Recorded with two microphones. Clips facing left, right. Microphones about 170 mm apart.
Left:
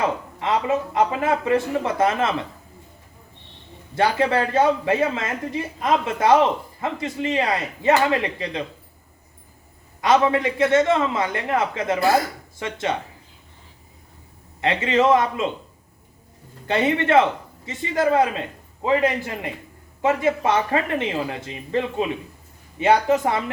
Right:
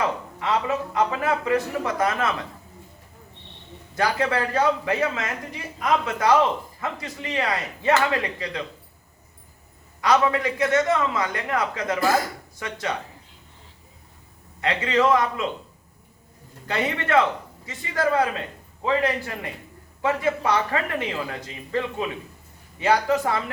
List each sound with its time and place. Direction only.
0.3 s speech: 25° left (ahead or behind)
3.9 s speech: 25° left (ahead or behind)
10.0 s speech: 25° left (ahead or behind)
14.6 s speech: 25° left (ahead or behind)
16.6 s speech: 25° left (ahead or behind)